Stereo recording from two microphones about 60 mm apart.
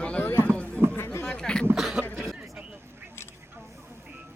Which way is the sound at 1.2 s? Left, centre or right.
Centre.